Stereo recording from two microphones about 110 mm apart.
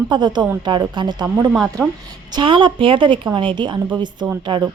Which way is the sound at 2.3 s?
45° right (ahead or behind).